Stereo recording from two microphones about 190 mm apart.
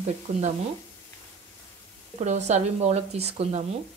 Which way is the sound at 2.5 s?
35° right (ahead or behind).